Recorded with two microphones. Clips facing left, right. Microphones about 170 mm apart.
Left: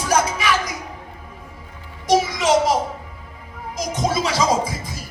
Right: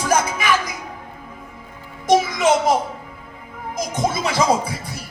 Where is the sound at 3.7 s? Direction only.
50° right (ahead or behind).